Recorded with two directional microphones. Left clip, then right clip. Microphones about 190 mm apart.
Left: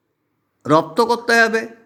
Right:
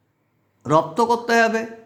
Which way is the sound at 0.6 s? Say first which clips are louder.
Left 3 dB; 25° left (ahead or behind).